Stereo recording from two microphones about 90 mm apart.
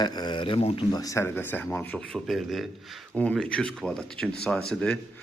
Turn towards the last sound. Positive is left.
turn(degrees=10)  # may be behind; listen again after turning